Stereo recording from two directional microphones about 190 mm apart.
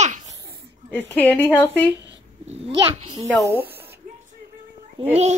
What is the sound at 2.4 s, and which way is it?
Speech, 30° right (ahead or behind).